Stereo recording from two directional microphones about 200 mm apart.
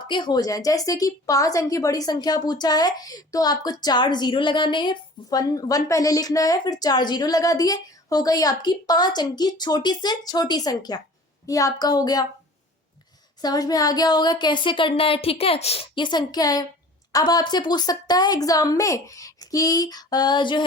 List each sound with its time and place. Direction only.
0.1 s a woman's voice: 20° left (ahead or behind)
13.4 s a woman's voice: 20° left (ahead or behind)